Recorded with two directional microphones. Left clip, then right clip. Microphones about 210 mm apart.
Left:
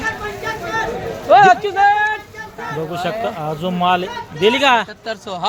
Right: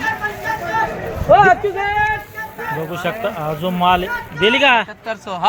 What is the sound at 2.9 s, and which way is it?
Speech, centre (ahead or behind).